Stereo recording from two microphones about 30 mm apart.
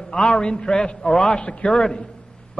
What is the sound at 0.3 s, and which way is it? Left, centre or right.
A man's voice, left.